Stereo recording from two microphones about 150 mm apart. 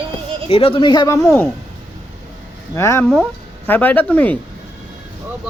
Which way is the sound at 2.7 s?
20° left (ahead or behind).